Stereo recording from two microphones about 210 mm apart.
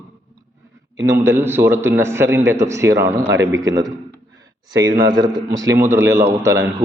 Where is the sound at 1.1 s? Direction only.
10° right (ahead or behind).